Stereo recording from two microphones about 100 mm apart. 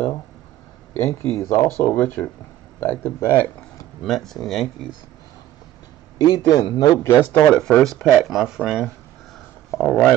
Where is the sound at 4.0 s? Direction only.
5° left (ahead or behind).